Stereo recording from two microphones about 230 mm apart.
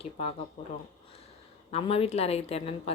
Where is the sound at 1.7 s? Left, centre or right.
Left.